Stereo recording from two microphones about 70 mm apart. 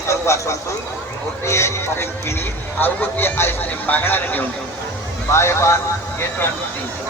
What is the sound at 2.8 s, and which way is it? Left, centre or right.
Speech, left.